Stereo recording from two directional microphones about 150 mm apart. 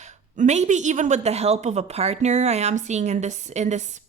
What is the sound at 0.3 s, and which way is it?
A woman's voice, 50° right (ahead or behind).